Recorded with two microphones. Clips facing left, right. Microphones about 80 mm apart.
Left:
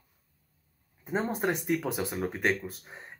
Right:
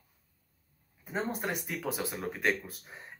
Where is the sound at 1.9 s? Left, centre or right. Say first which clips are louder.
Left 4 dB; centre.